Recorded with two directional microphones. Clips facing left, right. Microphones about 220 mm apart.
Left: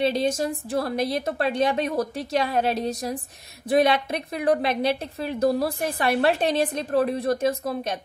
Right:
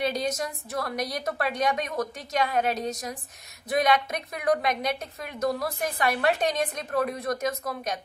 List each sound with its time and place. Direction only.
0.0 s a woman's voice: 30° left (ahead or behind)